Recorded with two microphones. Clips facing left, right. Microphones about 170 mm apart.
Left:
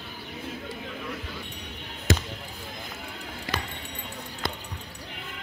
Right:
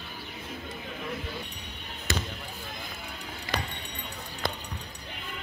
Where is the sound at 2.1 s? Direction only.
90° left.